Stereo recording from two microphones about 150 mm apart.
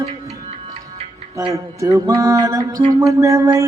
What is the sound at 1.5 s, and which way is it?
Music, 20° right (ahead or behind).